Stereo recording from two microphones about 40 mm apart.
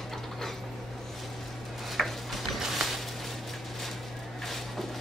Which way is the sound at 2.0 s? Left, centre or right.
Centre.